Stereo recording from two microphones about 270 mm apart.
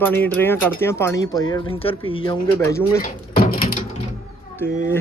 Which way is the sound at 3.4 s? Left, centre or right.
Left.